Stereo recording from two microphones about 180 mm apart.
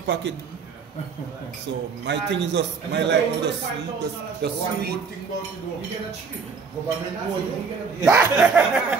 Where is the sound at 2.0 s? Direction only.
80° right.